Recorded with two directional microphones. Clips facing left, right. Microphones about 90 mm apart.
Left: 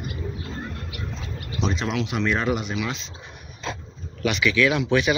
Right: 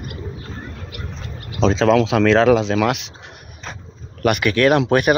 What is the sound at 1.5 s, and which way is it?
Speech, 90° right.